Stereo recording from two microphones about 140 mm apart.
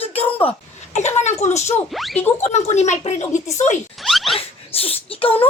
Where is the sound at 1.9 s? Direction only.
Centre (ahead or behind).